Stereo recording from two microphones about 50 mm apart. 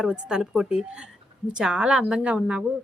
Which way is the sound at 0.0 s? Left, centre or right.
Centre.